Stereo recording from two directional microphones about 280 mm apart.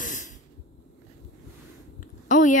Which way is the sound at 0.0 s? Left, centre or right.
Left.